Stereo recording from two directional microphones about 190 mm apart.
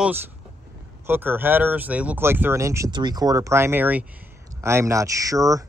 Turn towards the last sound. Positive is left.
turn(degrees=-15)  # may be behind; listen again after turning